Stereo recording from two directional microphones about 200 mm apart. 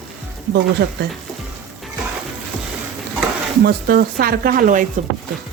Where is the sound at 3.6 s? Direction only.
50° right (ahead or behind).